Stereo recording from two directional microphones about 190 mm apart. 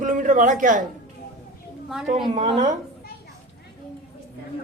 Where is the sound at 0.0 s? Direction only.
40° right (ahead or behind).